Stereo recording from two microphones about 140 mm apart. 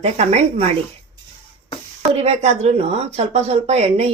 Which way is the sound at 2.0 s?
45° right (ahead or behind).